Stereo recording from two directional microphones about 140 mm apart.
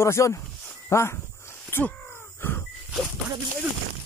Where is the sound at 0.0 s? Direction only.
20° left (ahead or behind).